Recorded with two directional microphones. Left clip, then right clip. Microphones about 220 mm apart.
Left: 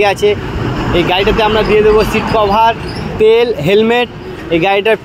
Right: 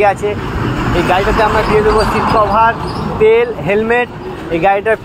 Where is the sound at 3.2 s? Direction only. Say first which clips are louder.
Left 1 dB; 55° left (ahead or behind).